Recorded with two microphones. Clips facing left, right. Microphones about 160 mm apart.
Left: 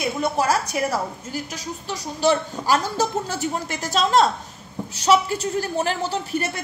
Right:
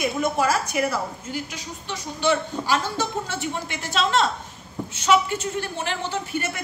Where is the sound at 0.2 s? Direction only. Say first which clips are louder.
Left 2 dB; 35° left (ahead or behind).